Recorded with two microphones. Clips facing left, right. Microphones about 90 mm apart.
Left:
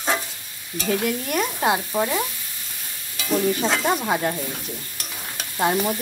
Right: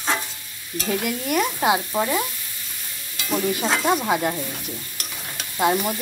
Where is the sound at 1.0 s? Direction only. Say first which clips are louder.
Right 1 dB; 5° right (ahead or behind).